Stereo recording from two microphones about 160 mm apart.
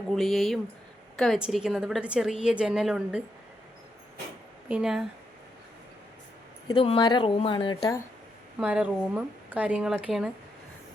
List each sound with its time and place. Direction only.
0.1 s a woman's voice: centre (ahead or behind)
4.7 s a woman's voice: 5° right (ahead or behind)
6.7 s speech: 30° left (ahead or behind)
8.5 s a woman's voice: 10° right (ahead or behind)